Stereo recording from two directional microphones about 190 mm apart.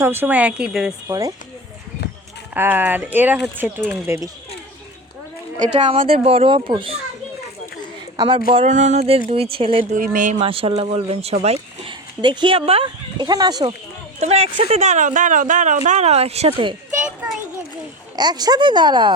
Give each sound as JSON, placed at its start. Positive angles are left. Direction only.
{"t": 0.0, "sound": "speech", "side_deg": -10}
{"t": 2.6, "sound": "speech", "side_deg": -10}
{"t": 5.7, "sound": "speech", "side_deg": -35}
{"t": 8.1, "sound": "speech", "side_deg": -20}
{"t": 8.4, "sound": "speech", "side_deg": -35}
{"t": 9.9, "sound": "speech", "side_deg": -45}
{"t": 10.4, "sound": "speech", "side_deg": -30}
{"t": 14.2, "sound": "speech", "side_deg": -35}
{"t": 18.2, "sound": "speech", "side_deg": -20}